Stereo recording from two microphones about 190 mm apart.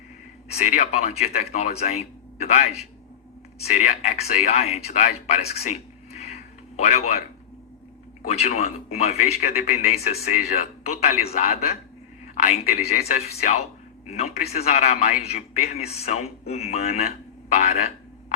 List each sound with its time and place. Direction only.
0.6 s speech: 40° left (ahead or behind)
8.3 s speech: 35° left (ahead or behind)